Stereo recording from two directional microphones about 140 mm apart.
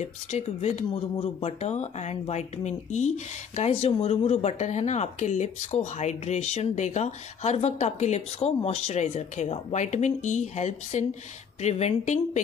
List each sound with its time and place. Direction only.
0.0 s speech: 55° left (ahead or behind)